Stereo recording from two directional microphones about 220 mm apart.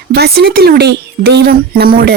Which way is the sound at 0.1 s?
45° right (ahead or behind).